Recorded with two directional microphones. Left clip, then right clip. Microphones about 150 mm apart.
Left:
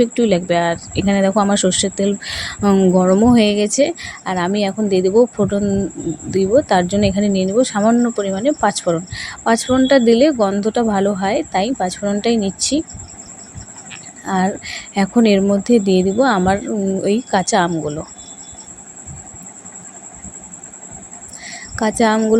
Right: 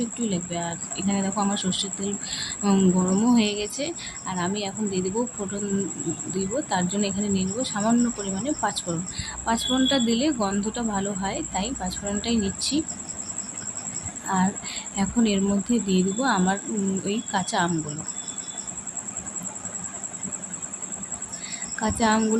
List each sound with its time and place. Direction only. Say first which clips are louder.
0.0 s speech: left 15 dB; 55° left (ahead or behind)
14.3 s speech: left 7 dB; 40° left (ahead or behind)
21.5 s a sound: left 9 dB; 40° left (ahead or behind)